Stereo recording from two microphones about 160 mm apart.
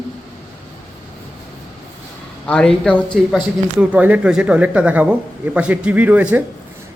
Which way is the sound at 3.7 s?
10° right (ahead or behind).